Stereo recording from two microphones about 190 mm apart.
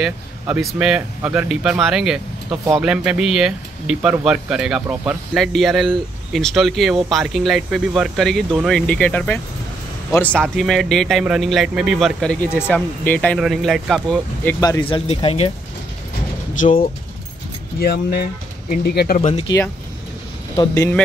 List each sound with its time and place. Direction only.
0.0 s speech: centre (ahead or behind)
14.6 s speech: 20° left (ahead or behind)
15.0 s speech: 30° left (ahead or behind)
17.7 s speech: 55° left (ahead or behind)
19.2 s speech: 35° left (ahead or behind)
20.5 s speech: 20° left (ahead or behind)